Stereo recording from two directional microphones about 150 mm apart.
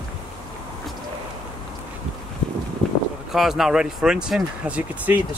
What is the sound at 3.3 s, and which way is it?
Speech, centre (ahead or behind).